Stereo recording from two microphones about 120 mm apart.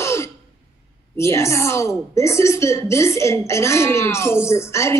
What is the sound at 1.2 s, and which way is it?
A woman's voice, 25° left (ahead or behind).